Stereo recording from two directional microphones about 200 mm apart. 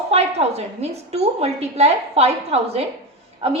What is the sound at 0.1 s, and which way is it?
A woman's voice, 30° right (ahead or behind).